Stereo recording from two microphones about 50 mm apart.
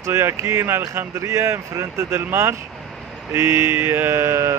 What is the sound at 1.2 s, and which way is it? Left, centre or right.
Speech, right.